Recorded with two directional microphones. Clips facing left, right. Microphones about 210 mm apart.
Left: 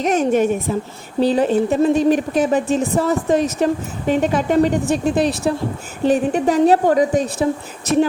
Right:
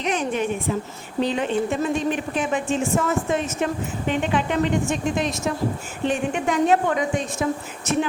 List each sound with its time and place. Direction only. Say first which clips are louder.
0.0 s a woman's voice: left 8 dB; 40° left (ahead or behind)